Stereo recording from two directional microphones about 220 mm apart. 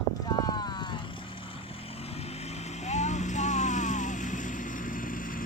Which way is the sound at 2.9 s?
30° left (ahead or behind).